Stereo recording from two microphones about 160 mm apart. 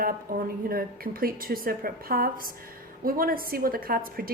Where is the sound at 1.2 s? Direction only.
65° right (ahead or behind).